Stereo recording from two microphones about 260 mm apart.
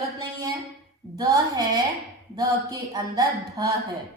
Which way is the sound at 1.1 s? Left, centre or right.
Centre.